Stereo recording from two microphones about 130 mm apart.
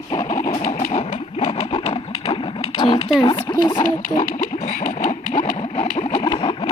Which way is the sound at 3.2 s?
35° left (ahead or behind).